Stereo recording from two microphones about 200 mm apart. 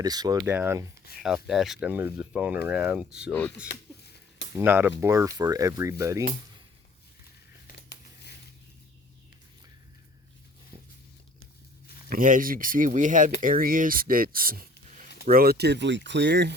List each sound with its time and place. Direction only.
0.0 s speech: 20° right (ahead or behind)
1.2 s speech: centre (ahead or behind)
3.7 s a sound: 55° left (ahead or behind)
4.5 s speech: 10° right (ahead or behind)
12.0 s speech: 45° right (ahead or behind)